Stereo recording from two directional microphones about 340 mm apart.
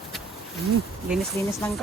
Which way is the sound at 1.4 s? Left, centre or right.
Centre.